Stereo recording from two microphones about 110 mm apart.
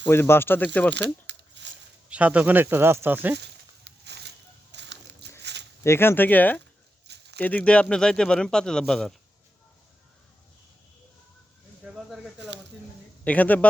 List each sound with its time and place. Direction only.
0.1 s speech: 20° left (ahead or behind)
2.0 s speech: 10° right (ahead or behind)
5.8 s speech: 20° left (ahead or behind); by 9.1 s centre (ahead or behind)
11.8 s a sound: 5° right (ahead or behind)
13.2 s speech: 15° left (ahead or behind)